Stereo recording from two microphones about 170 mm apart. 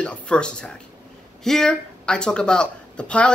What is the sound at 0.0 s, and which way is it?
Speech, 5° left (ahead or behind).